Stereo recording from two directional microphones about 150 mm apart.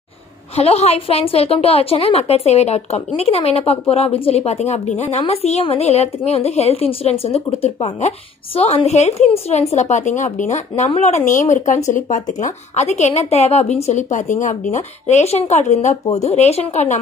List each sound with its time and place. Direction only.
0.6 s a woman's voice: 45° left (ahead or behind)